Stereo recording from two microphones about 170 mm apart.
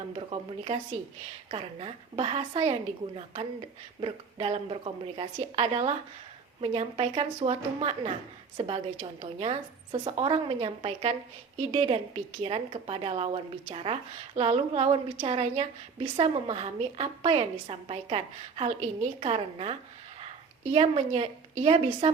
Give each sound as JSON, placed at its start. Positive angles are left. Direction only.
{"t": 0.2, "sound": "a woman's voice", "side_deg": -35}
{"t": 4.0, "sound": "a woman's voice", "side_deg": -35}